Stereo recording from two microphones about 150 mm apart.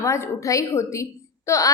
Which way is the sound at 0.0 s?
20° left (ahead or behind).